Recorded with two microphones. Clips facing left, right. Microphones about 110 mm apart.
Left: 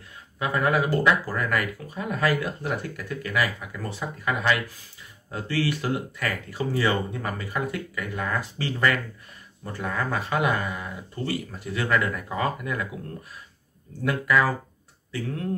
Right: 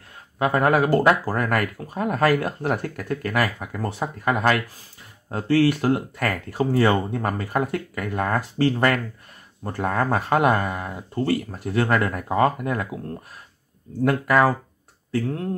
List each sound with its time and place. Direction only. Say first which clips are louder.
0.4 s speech: right 5 dB; 50° right (ahead or behind)
14.0 s speech: right 4 dB; 45° right (ahead or behind)